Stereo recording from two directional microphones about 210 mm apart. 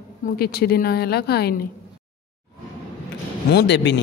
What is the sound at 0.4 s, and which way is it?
A woman's voice, 45° left (ahead or behind).